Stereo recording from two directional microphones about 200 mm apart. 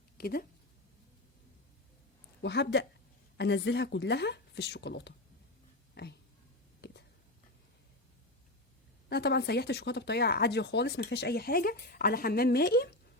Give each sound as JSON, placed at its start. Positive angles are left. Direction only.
{"t": 0.2, "sound": "speech", "side_deg": 50}
{"t": 2.4, "sound": "speech", "side_deg": 60}
{"t": 6.8, "sound": "a sound", "side_deg": 55}
{"t": 9.0, "sound": "speech", "side_deg": 55}